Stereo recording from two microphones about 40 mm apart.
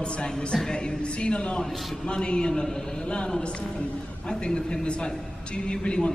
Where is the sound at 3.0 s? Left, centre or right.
Left.